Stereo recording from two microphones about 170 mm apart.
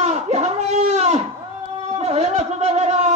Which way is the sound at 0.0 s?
40° right (ahead or behind).